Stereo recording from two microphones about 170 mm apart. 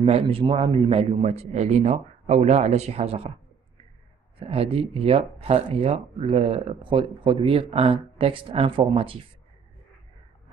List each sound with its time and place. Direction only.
0.0 s speech: 35° right (ahead or behind)
4.4 s speech: 35° right (ahead or behind)